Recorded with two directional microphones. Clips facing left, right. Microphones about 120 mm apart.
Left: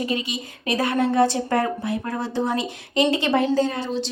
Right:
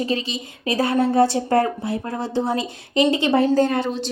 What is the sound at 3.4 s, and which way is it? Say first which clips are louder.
Speech: right 3 dB; 45° right (ahead or behind).